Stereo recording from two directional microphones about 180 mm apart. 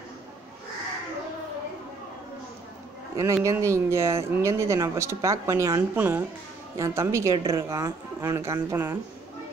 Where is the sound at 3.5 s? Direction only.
15° right (ahead or behind).